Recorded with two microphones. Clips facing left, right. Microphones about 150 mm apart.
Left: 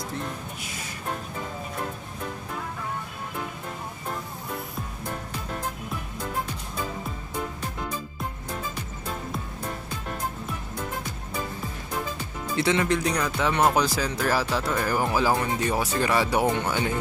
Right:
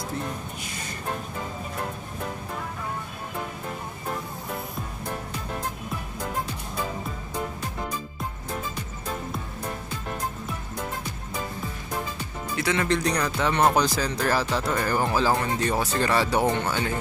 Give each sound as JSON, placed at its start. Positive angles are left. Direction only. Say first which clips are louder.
{"t": 12.5, "sound": "speech", "louder": "left 3 dB", "side_deg": 25}
{"t": 12.8, "sound": "speech", "louder": "even", "side_deg": 5}